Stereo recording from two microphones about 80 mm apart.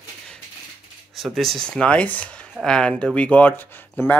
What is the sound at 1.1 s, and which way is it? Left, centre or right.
Speech, centre.